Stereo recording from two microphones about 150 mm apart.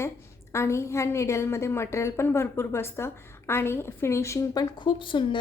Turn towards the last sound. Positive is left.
turn(degrees=35)  # may be behind; listen again after turning